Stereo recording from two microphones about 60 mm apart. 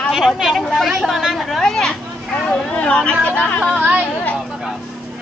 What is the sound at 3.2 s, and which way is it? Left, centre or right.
Speech, left.